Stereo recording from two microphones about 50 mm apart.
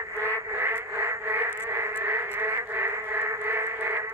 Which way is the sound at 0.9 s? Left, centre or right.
Right.